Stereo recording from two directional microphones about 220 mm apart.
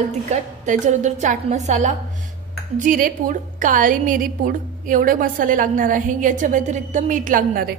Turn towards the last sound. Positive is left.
turn(degrees=-40)  # may be behind; listen again after turning